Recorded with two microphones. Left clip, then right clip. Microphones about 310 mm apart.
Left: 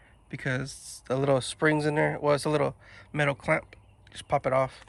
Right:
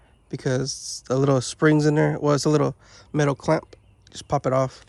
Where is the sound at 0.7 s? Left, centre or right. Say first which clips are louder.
Right 6 dB; right.